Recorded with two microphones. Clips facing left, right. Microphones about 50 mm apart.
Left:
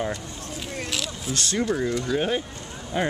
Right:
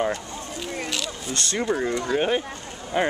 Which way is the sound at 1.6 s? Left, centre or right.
Centre.